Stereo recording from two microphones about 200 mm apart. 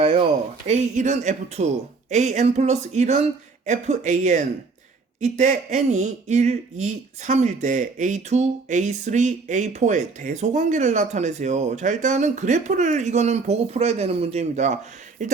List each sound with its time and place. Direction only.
0.0 s speech: 30° right (ahead or behind)